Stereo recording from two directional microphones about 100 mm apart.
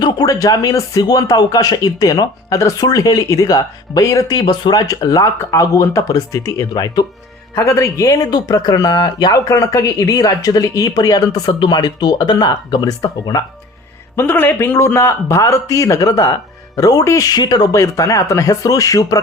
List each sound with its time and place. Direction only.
0.0 s speech: 40° left (ahead or behind)
7.5 s speech: 30° left (ahead or behind); by 13.4 s 45° left (ahead or behind)
14.2 s a man's voice: 20° left (ahead or behind); by 17.7 s 40° left (ahead or behind)
17.7 s speech: 30° left (ahead or behind)